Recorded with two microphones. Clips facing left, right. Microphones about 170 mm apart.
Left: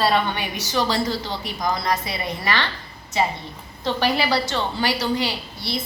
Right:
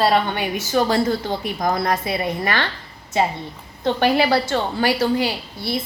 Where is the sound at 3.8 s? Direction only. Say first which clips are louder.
Right 4 dB; 55° right (ahead or behind).